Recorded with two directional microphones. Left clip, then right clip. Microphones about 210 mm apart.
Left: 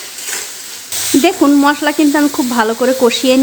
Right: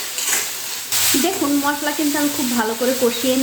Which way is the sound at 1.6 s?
45° left (ahead or behind).